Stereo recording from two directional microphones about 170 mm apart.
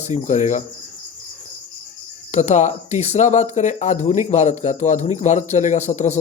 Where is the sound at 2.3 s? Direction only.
40° left (ahead or behind).